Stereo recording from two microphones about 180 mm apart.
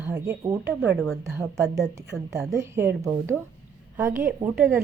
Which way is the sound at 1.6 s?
15° right (ahead or behind).